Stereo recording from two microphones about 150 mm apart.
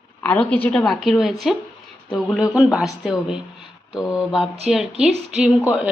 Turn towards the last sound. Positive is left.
turn(degrees=-10)  # may be behind; listen again after turning